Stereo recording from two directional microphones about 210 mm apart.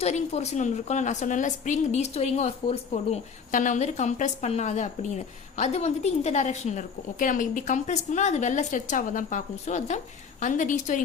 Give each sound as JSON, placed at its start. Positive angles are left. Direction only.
{"t": 0.0, "sound": "a woman's voice", "side_deg": 30}